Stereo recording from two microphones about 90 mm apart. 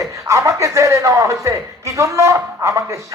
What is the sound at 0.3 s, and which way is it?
A man's voice, 35° right (ahead or behind).